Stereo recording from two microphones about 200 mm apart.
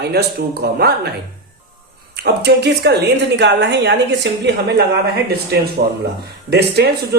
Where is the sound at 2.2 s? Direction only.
55° right (ahead or behind).